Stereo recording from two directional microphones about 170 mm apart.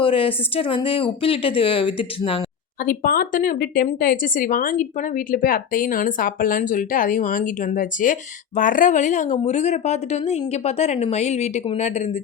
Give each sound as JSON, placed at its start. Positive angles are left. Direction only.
{"t": 0.0, "sound": "speech", "side_deg": 30}
{"t": 2.8, "sound": "a woman's voice", "side_deg": 60}